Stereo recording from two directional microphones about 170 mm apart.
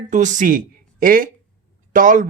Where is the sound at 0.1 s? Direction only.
45° right (ahead or behind).